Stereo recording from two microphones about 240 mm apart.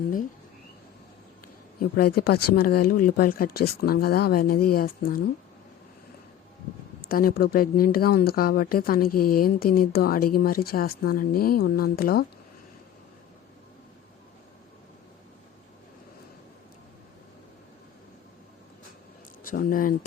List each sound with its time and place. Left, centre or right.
1.8 s speech: left
7.1 s speech: left
19.5 s speech: left